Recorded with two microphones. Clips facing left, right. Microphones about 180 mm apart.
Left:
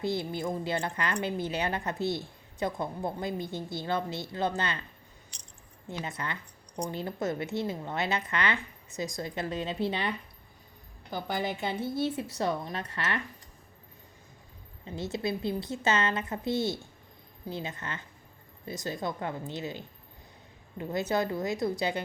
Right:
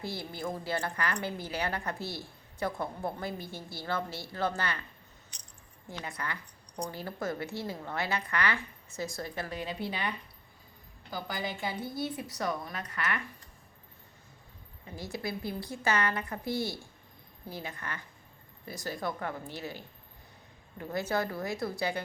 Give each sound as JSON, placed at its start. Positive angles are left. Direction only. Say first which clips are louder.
{"t": 0.0, "sound": "a woman's voice", "louder": "left 6 dB", "side_deg": 20}
{"t": 5.9, "sound": "a woman's voice", "louder": "left 3 dB", "side_deg": 20}
{"t": 11.1, "sound": "a woman's voice", "louder": "left 4 dB", "side_deg": 25}
{"t": 14.8, "sound": "a woman's voice", "louder": "left 5 dB", "side_deg": 25}